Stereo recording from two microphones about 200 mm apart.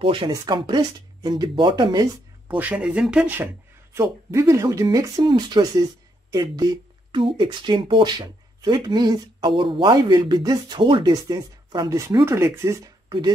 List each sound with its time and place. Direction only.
0.0 s speech: 25° right (ahead or behind)
2.4 s speech: 10° right (ahead or behind)